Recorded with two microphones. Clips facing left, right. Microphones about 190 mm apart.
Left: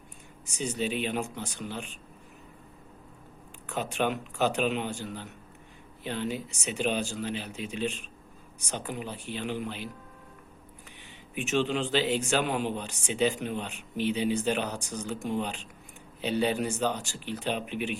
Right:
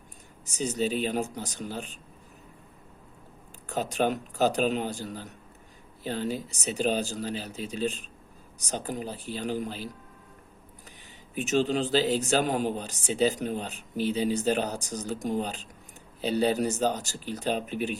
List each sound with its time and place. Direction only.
0.4 s a man's voice: 40° right (ahead or behind)
3.7 s a man's voice: 40° right (ahead or behind)
11.3 s a man's voice: 40° right (ahead or behind)